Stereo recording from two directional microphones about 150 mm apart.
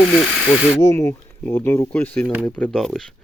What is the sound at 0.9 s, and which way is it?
Speech, 15° left (ahead or behind).